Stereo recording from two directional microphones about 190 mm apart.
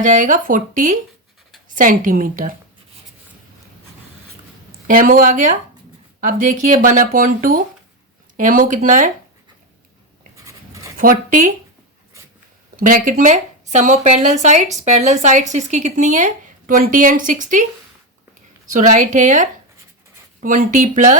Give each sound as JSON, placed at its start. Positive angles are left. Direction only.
{"t": 0.0, "sound": "speech", "side_deg": -45}
{"t": 4.9, "sound": "speech", "side_deg": -50}
{"t": 10.3, "sound": "a sound", "side_deg": -15}
{"t": 11.0, "sound": "speech", "side_deg": -45}
{"t": 12.7, "sound": "speech", "side_deg": -45}
{"t": 18.7, "sound": "speech", "side_deg": -40}